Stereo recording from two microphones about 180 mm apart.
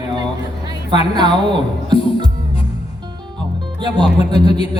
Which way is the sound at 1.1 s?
25° right (ahead or behind).